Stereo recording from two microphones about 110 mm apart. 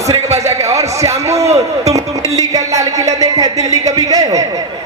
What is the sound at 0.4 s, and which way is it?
A man's voice, 30° right (ahead or behind).